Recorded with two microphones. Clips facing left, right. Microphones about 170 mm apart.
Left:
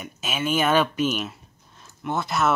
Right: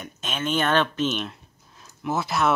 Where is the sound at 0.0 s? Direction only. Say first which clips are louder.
Left 2 dB; 5° left (ahead or behind).